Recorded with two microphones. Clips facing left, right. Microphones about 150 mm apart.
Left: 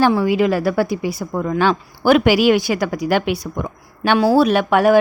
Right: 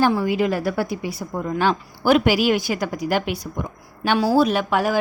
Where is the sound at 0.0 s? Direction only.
85° left.